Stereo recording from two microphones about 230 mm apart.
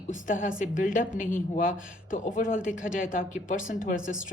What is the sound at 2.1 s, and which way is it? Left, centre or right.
Speech, left.